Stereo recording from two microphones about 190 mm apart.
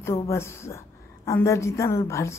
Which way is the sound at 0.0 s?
15° left (ahead or behind).